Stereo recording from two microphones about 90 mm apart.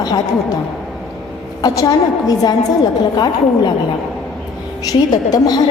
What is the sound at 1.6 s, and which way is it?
Speech, 50° left (ahead or behind).